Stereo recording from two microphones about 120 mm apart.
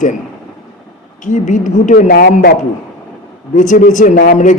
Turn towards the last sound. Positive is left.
turn(degrees=90)